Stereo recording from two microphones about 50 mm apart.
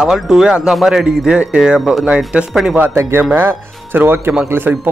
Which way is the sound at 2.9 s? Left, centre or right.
Right.